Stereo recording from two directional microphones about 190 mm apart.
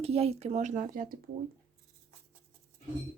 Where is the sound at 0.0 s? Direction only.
30° right (ahead or behind).